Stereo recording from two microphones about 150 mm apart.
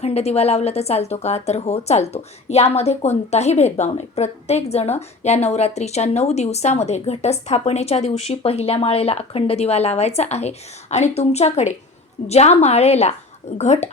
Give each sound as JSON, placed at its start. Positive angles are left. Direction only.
{"t": 0.0, "sound": "a woman's voice", "side_deg": 45}